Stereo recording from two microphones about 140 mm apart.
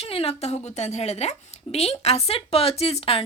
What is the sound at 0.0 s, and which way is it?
A woman's voice, 45° left (ahead or behind).